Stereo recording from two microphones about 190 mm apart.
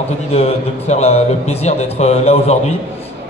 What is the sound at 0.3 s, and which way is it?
A man's voice, 35° left (ahead or behind).